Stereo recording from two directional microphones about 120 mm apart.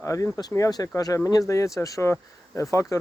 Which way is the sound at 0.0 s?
25° left (ahead or behind).